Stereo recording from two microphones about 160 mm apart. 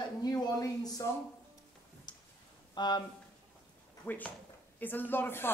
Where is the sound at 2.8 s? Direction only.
25° left (ahead or behind).